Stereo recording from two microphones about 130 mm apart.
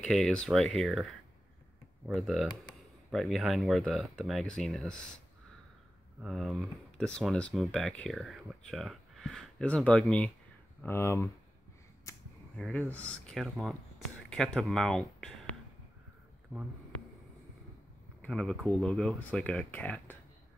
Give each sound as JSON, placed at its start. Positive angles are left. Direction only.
{"t": 0.0, "sound": "speech", "side_deg": 5}
{"t": 2.0, "sound": "speech", "side_deg": 0}
{"t": 6.2, "sound": "speech", "side_deg": -5}
{"t": 10.8, "sound": "speech", "side_deg": 20}
{"t": 12.1, "sound": "a sound", "side_deg": 20}
{"t": 12.5, "sound": "speech", "side_deg": 5}
{"t": 16.5, "sound": "speech", "side_deg": -15}
{"t": 18.2, "sound": "speech", "side_deg": 5}